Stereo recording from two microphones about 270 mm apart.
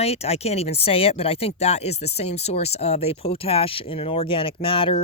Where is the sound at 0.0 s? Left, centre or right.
Left.